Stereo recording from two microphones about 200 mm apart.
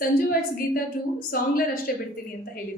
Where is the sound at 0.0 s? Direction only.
50° left (ahead or behind).